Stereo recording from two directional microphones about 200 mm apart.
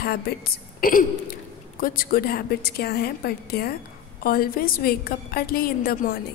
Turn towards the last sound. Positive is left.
turn(degrees=50)  # may be behind; listen again after turning